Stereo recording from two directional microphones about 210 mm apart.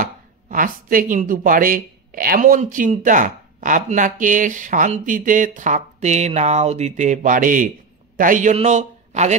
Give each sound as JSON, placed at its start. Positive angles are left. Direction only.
{"t": 0.0, "sound": "a man's voice", "side_deg": -40}